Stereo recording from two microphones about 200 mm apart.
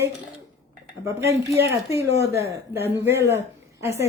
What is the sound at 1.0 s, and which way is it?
Speech, 15° right (ahead or behind).